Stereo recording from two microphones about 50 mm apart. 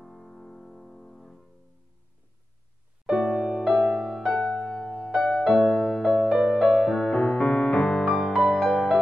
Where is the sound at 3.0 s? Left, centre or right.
Centre.